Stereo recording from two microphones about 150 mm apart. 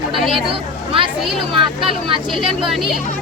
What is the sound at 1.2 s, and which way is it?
Speech, centre (ahead or behind).